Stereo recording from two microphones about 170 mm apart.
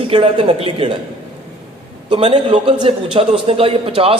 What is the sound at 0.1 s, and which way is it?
Speech, 30° right (ahead or behind).